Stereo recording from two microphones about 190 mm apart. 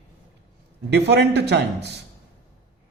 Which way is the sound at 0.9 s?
65° right (ahead or behind).